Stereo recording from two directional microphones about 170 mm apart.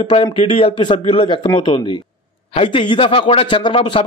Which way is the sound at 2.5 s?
30° left (ahead or behind).